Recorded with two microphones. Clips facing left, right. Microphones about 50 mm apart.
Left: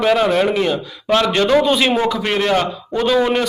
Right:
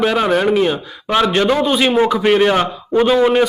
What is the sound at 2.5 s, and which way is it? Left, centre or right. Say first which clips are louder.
Speech: right 2 dB; right.